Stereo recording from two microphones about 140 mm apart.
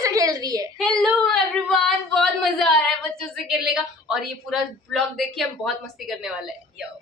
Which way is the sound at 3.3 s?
Centre (ahead or behind).